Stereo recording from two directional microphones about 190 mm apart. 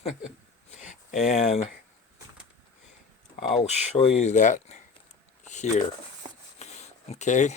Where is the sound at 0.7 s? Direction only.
40° left (ahead or behind).